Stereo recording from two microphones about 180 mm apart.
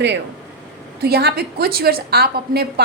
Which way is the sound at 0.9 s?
60° right (ahead or behind).